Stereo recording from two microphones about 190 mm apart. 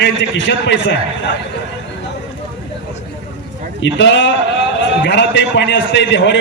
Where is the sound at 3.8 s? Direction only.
70° left (ahead or behind).